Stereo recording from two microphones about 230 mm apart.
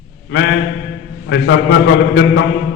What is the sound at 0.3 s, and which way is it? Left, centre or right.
A man's voice, left.